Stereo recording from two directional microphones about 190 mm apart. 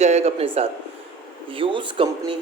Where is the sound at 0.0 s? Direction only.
35° right (ahead or behind).